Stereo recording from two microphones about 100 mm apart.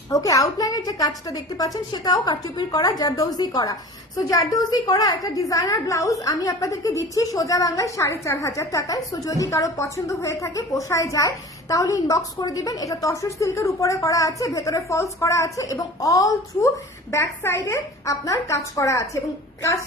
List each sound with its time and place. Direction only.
0.1 s a woman's voice: 35° left (ahead or behind)